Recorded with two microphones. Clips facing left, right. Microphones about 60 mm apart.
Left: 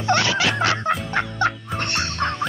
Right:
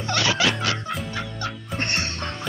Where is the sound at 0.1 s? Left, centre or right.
Left.